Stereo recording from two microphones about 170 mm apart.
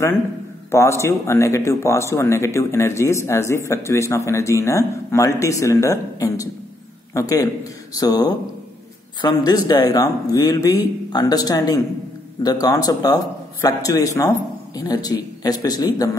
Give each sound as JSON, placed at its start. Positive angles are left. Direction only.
{"t": 0.7, "sound": "a man's voice", "side_deg": 15}